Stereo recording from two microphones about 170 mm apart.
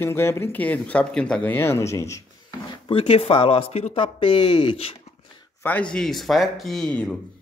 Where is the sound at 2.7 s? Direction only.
30° left (ahead or behind).